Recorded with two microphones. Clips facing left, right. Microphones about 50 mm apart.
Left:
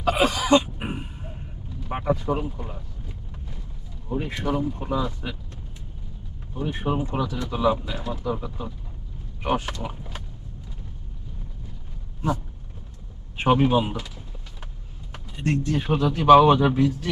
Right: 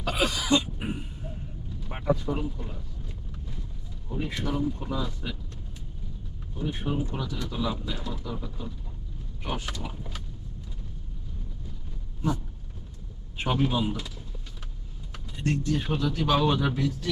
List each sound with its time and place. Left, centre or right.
0.0 s a sound: left
1.9 s speech: left
4.1 s speech: left
6.5 s a man's voice: left
13.3 s a man's voice: left
15.1 s speech: left